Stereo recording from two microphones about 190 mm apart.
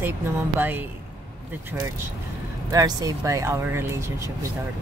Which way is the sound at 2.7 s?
20° right (ahead or behind).